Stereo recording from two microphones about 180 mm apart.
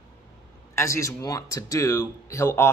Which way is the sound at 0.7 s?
15° left (ahead or behind).